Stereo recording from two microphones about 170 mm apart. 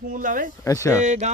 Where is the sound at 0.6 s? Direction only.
15° left (ahead or behind).